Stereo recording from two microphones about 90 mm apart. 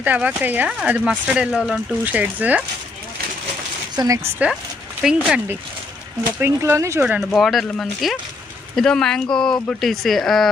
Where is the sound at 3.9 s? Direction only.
40° right (ahead or behind).